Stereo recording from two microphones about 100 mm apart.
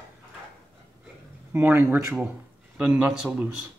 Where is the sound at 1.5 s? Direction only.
20° right (ahead or behind).